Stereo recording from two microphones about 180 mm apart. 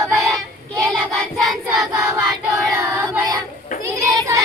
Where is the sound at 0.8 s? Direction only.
5° left (ahead or behind).